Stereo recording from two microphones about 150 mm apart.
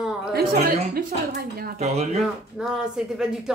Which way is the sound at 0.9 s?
90° right.